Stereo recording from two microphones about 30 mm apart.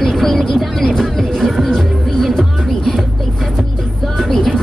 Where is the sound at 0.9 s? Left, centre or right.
Centre.